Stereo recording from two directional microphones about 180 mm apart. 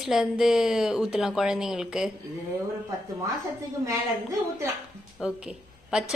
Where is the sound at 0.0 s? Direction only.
5° right (ahead or behind).